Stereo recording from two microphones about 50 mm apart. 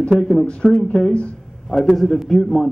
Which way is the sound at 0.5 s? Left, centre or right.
Centre.